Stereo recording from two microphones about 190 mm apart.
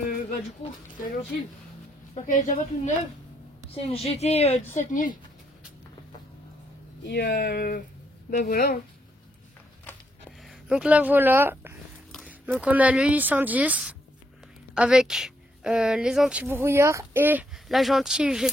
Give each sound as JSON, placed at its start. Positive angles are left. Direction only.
{"t": 0.6, "sound": "speech", "side_deg": 45}
{"t": 2.2, "sound": "a woman's voice", "side_deg": 40}
{"t": 3.7, "sound": "a woman's voice", "side_deg": 30}
{"t": 7.0, "sound": "speech", "side_deg": 60}
{"t": 10.4, "sound": "speech", "side_deg": -5}
{"t": 12.1, "sound": "a woman's voice", "side_deg": 0}